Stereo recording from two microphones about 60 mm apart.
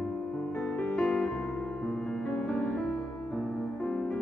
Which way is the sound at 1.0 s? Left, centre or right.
Centre.